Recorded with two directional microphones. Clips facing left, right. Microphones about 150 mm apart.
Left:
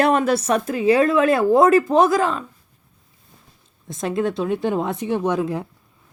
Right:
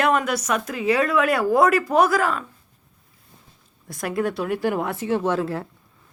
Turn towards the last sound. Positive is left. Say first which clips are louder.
# left 2 dB
turn(degrees=15)  # may be behind; listen again after turning